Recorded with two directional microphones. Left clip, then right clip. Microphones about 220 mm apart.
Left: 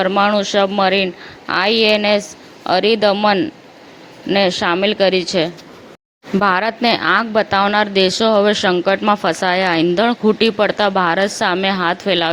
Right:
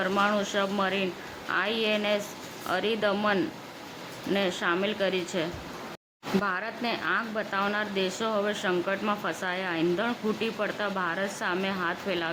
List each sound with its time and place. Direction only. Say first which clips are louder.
0.0 s a woman's voice: left 11 dB; 30° left (ahead or behind)